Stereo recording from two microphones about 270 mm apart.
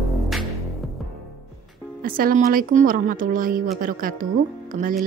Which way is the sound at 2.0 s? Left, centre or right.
Right.